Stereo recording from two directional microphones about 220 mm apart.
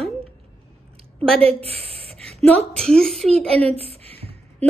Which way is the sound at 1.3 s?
25° right (ahead or behind).